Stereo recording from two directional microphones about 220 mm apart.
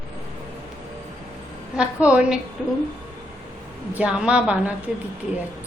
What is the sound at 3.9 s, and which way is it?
Speech, 5° right (ahead or behind).